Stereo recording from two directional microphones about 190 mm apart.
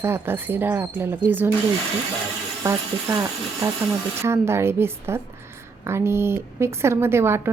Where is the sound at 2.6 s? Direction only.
15° right (ahead or behind).